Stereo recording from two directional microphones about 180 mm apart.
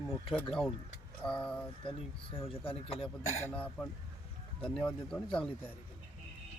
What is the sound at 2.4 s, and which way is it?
Speech, 30° left (ahead or behind).